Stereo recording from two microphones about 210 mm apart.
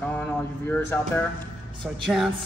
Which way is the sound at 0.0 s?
5° left (ahead or behind).